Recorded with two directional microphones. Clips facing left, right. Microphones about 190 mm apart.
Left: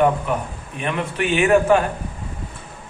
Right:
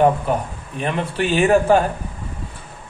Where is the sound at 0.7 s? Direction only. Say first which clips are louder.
Right 2 dB; 35° right (ahead or behind).